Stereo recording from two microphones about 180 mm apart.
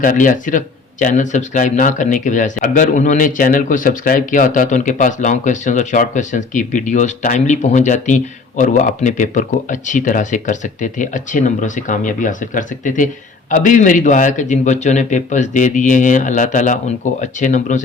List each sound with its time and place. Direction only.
0.0 s speech: 45° left (ahead or behind)